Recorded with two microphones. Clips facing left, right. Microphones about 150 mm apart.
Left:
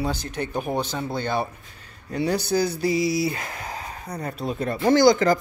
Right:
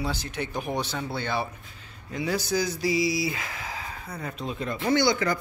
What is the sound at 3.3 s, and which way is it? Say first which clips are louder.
Speech: left 3 dB; 50° left (ahead or behind).